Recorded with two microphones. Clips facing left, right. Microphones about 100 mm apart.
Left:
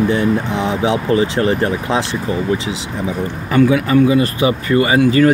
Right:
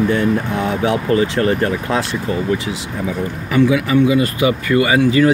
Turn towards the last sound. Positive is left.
turn(degrees=40)  # may be behind; listen again after turning